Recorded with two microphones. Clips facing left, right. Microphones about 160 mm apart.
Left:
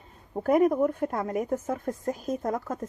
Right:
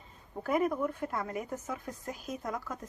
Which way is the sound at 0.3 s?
45° left (ahead or behind).